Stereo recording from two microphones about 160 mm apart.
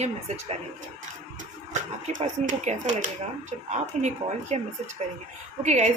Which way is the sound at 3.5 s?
45° right (ahead or behind).